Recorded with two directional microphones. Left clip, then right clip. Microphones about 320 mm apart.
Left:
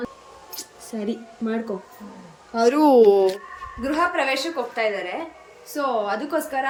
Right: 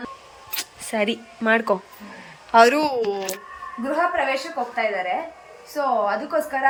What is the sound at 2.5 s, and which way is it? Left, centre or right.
Speech, centre.